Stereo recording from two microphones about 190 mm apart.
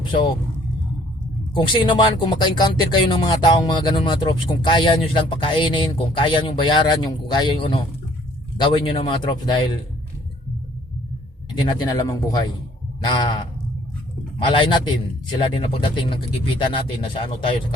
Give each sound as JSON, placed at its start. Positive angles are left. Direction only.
{"t": 1.5, "sound": "speech", "side_deg": 25}
{"t": 11.5, "sound": "speech", "side_deg": 20}